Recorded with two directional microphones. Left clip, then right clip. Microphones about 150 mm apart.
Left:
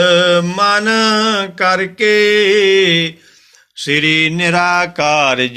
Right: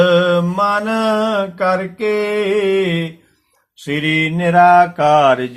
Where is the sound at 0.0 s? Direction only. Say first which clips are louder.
Left 2 dB; 20° left (ahead or behind).